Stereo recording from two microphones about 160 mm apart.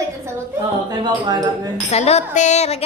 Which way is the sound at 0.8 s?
25° right (ahead or behind).